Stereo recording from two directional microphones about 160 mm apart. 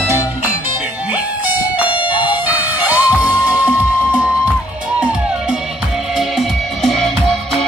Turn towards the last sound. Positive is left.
turn(degrees=0)  # may be behind; listen again after turning